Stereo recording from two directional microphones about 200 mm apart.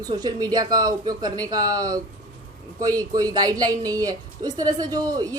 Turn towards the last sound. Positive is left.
turn(degrees=-20)  # may be behind; listen again after turning